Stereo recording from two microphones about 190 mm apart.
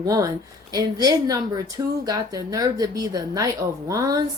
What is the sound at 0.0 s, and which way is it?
Speech, 20° right (ahead or behind).